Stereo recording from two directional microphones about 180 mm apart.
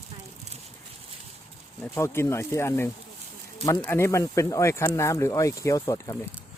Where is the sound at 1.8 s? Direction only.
15° left (ahead or behind).